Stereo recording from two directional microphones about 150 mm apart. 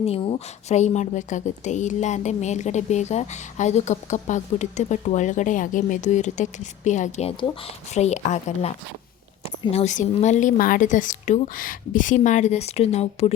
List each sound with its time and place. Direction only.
0.0 s a woman's voice: 40° left (ahead or behind)
9.7 s speech: 50° left (ahead or behind)